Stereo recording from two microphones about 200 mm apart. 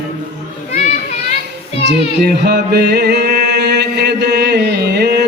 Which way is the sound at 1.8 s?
60° right (ahead or behind).